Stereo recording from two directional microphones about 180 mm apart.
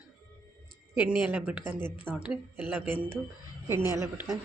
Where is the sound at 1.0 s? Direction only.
5° right (ahead or behind).